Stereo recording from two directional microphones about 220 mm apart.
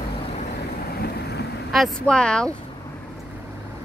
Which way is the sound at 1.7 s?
Centre (ahead or behind).